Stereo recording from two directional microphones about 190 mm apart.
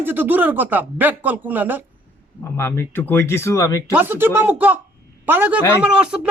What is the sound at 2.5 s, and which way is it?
Speech, 15° left (ahead or behind).